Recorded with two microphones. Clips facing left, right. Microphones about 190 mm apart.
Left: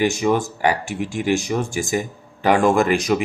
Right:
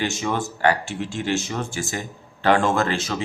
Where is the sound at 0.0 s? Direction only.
15° left (ahead or behind).